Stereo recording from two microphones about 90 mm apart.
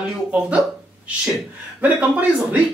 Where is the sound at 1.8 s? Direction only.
20° right (ahead or behind).